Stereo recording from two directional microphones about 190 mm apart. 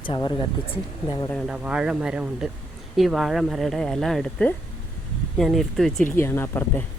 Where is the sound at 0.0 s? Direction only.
25° left (ahead or behind).